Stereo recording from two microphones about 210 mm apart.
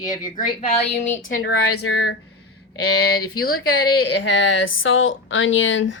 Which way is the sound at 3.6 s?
75° left (ahead or behind).